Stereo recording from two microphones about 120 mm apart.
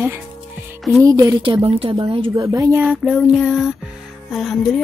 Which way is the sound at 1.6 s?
55° right (ahead or behind).